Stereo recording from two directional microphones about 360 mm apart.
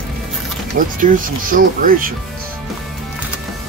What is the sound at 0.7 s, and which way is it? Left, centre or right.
Speech, right.